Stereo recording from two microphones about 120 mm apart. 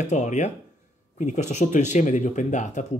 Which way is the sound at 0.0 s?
80° left.